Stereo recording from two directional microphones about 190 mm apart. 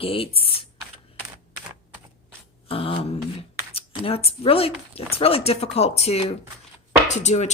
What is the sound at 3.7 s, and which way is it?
A woman's voice, 30° left (ahead or behind).